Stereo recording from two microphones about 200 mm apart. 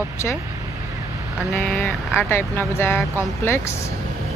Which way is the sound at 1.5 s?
5° left (ahead or behind).